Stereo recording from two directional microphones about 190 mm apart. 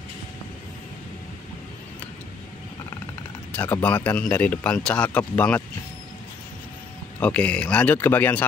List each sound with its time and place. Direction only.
3.5 s speech: 10° left (ahead or behind)
7.2 s speech: 5° left (ahead or behind)